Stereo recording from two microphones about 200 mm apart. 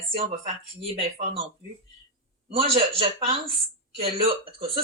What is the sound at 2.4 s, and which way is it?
A woman's voice, 30° right (ahead or behind).